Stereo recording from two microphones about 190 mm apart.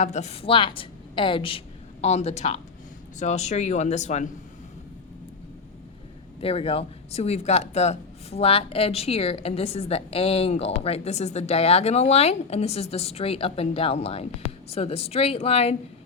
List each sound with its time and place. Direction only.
0.0 s a woman's voice: 35° left (ahead or behind)
6.4 s speech: 30° left (ahead or behind)